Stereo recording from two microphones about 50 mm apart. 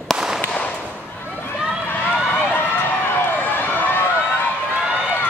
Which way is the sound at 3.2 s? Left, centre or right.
Left.